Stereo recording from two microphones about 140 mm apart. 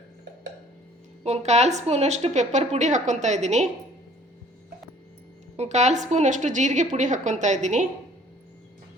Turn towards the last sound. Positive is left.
turn(degrees=-60)  # may be behind; listen again after turning